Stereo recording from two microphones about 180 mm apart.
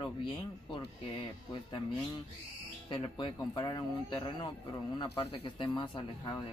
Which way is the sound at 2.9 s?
25° left (ahead or behind).